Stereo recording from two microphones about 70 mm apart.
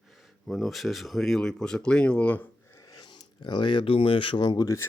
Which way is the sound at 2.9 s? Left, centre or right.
Left.